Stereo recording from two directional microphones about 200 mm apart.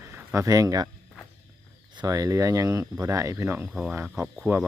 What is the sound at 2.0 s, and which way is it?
Speech, 15° right (ahead or behind).